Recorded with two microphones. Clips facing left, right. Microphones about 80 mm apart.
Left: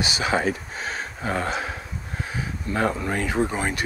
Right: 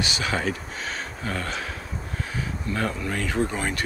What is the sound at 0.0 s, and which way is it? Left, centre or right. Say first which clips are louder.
Speech: left 3 dB; centre.